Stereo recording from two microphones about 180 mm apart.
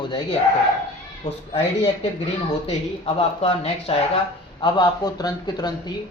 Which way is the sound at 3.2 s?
35° left (ahead or behind).